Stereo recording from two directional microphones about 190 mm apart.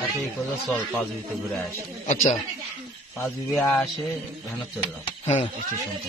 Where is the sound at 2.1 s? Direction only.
35° left (ahead or behind).